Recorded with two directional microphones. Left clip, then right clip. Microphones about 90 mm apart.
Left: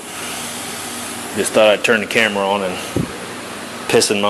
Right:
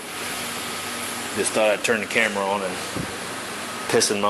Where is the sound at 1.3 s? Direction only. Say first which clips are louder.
Left 8 dB; 40° left (ahead or behind).